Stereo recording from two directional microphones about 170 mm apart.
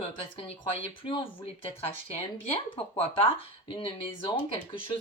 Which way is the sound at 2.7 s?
30° left (ahead or behind).